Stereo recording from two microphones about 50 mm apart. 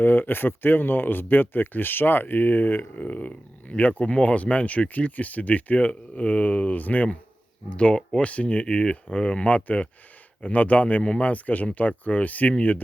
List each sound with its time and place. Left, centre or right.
0.0 s speech: left
7.7 s speech: left